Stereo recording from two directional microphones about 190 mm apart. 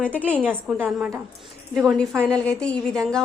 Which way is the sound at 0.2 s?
10° right (ahead or behind).